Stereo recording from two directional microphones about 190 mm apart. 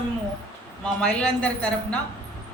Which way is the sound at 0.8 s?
5° left (ahead or behind).